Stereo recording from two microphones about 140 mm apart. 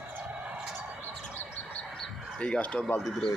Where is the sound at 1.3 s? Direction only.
10° left (ahead or behind).